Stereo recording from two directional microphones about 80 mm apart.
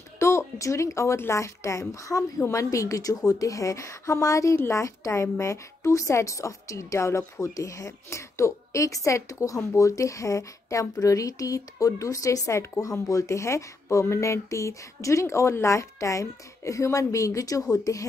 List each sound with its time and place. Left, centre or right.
0.2 s a woman's voice: left